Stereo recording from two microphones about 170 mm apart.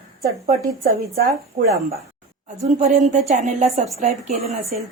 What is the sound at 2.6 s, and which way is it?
A woman's voice, 45° right (ahead or behind).